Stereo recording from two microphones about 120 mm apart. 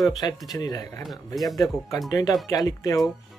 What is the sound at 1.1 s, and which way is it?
Speech, centre (ahead or behind).